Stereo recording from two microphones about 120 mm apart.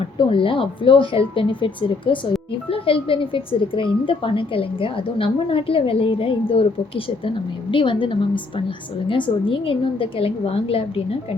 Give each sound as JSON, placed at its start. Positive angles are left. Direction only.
{"t": 0.2, "sound": "speech", "side_deg": 45}